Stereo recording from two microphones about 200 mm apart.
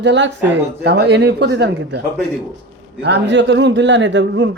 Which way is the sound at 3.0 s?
60° right (ahead or behind).